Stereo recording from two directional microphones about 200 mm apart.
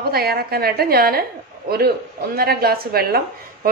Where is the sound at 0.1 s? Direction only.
50° right (ahead or behind).